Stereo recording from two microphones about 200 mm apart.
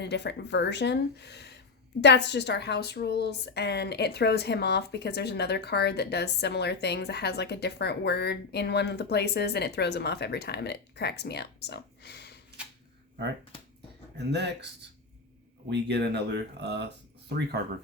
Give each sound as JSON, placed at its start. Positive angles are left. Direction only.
{"t": 0.0, "sound": "a woman's voice", "side_deg": 60}
{"t": 14.2, "sound": "speech", "side_deg": -60}
{"t": 15.7, "sound": "speech", "side_deg": -60}